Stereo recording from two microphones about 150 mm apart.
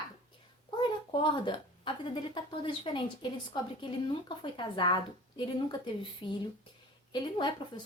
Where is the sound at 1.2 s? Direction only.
35° left (ahead or behind).